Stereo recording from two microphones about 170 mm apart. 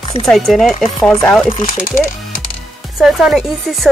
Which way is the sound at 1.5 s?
50° left (ahead or behind).